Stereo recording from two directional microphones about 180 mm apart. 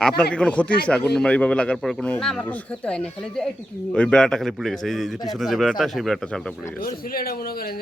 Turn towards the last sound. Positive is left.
turn(degrees=55)  # may be behind; listen again after turning